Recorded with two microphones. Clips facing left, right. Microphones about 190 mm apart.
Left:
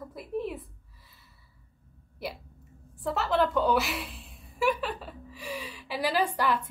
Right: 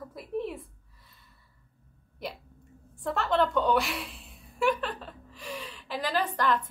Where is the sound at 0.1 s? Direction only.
Centre (ahead or behind).